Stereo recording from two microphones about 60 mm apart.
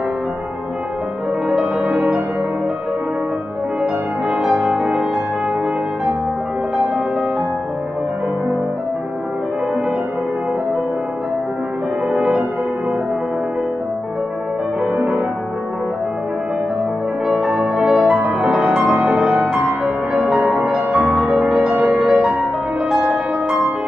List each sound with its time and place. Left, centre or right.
1.5 s music: centre
3.8 s music: centre
12.1 s music: centre
15.0 s music: centre
17.7 s music: centre